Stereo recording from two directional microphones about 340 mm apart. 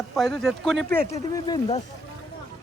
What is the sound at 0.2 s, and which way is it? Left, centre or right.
Speech, centre.